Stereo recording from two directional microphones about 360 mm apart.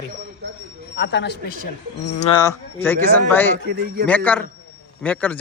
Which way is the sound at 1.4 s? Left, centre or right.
Left.